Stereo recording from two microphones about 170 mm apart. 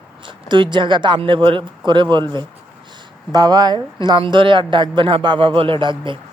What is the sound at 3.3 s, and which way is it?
Speech, 25° right (ahead or behind).